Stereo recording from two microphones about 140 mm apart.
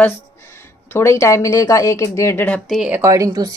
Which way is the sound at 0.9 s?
20° left (ahead or behind).